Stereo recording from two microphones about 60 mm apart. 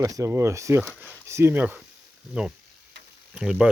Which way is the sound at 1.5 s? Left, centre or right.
Right.